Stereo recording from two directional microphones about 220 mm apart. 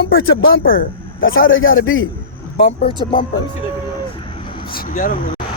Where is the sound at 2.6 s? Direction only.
25° left (ahead or behind).